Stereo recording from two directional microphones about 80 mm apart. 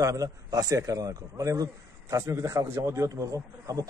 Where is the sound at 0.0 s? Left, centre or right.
Right.